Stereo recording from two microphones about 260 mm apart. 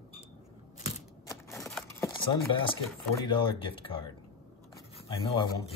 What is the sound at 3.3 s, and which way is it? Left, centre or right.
Speech, centre.